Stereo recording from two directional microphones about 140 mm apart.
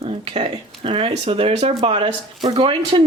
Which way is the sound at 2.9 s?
40° right (ahead or behind).